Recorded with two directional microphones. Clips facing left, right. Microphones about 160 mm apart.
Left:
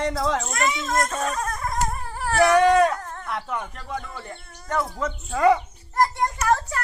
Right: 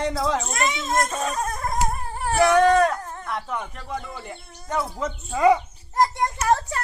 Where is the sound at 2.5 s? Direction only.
10° left (ahead or behind).